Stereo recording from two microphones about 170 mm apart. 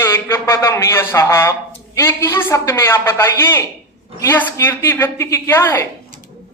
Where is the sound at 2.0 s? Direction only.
15° left (ahead or behind).